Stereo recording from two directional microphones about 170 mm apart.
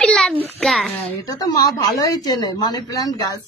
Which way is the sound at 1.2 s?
20° left (ahead or behind).